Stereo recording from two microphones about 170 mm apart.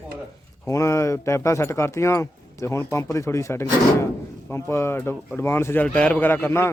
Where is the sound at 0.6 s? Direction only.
20° left (ahead or behind).